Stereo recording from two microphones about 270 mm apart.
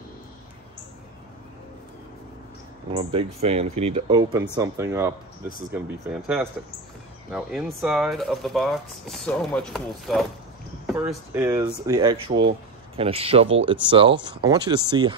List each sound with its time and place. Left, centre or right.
2.9 s speech: right